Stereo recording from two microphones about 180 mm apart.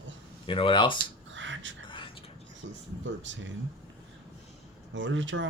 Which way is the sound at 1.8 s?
25° left (ahead or behind).